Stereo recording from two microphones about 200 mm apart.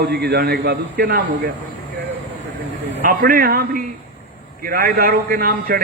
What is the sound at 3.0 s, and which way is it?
A man's voice, 45° right (ahead or behind).